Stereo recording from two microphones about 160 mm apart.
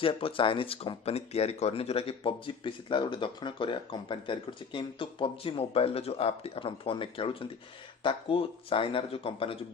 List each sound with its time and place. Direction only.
0.0 s speech: 35° left (ahead or behind)